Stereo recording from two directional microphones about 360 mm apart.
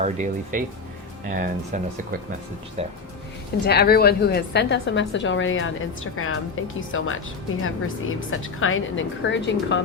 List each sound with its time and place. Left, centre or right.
0.0 s speech: centre
3.7 s a woman's voice: left